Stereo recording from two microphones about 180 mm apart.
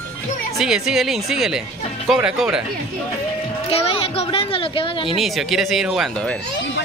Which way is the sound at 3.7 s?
30° left (ahead or behind).